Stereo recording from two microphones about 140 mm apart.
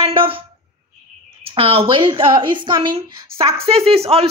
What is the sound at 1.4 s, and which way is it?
A woman's voice, 40° right (ahead or behind).